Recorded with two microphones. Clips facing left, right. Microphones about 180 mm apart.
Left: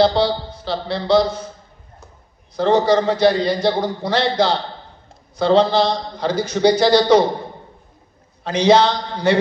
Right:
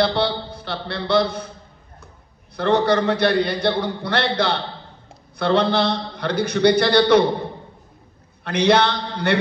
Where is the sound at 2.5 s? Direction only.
60° right (ahead or behind).